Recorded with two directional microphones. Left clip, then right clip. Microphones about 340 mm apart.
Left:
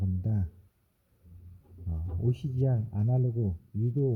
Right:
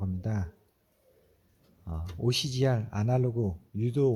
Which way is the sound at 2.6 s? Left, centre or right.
Right.